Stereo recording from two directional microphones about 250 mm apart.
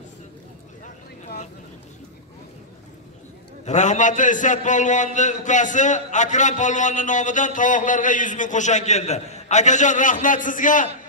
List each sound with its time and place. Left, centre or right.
3.6 s a man's voice: left